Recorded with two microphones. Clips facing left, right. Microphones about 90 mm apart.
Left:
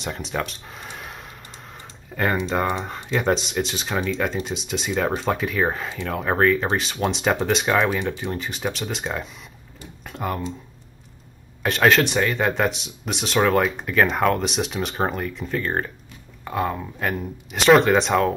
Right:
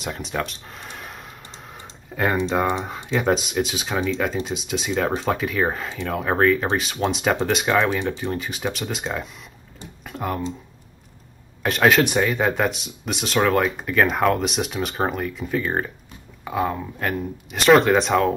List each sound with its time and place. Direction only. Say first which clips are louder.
0.0 s speech: even; centre (ahead or behind)
10.0 s computer keyboard: even; centre (ahead or behind)
11.6 s speech: even; centre (ahead or behind)